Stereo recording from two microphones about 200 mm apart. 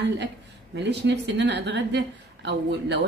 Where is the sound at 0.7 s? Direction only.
60° right (ahead or behind).